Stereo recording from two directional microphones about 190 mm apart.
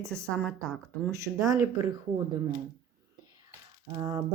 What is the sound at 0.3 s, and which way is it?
A woman's voice, 5° left (ahead or behind).